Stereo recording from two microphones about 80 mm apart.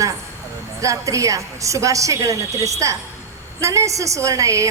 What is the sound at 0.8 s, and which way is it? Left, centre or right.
A woman's voice, right.